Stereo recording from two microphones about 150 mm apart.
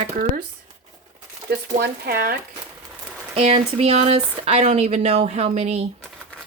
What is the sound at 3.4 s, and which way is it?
Speech, 40° right (ahead or behind).